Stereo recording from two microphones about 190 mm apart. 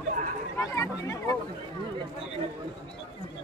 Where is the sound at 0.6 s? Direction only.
15° left (ahead or behind).